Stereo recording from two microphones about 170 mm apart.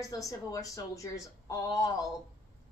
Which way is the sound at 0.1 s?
20° left (ahead or behind).